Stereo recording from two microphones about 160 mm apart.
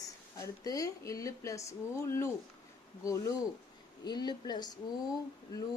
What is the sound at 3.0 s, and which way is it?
A woman's voice, 20° left (ahead or behind).